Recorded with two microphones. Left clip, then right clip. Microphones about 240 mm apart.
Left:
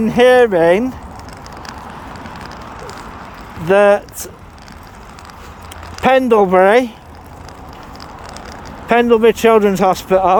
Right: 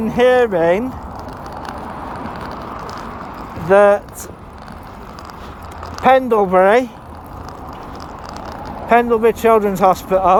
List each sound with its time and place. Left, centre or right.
0.0 s speech: left
2.5 s vehicle: right
3.7 s speech: left
6.1 s speech: left
8.9 s speech: left